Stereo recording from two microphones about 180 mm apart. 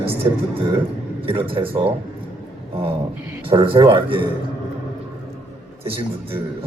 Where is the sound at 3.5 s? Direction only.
30° right (ahead or behind).